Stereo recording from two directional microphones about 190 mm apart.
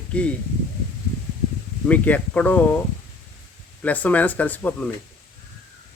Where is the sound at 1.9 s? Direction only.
10° left (ahead or behind).